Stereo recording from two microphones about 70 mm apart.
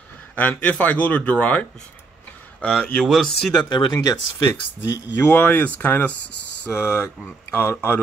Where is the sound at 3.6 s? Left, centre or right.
Left.